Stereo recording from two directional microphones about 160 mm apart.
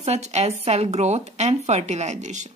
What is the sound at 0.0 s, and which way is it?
A woman's voice, 45° right (ahead or behind).